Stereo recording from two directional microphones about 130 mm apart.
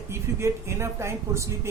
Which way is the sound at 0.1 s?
20° right (ahead or behind).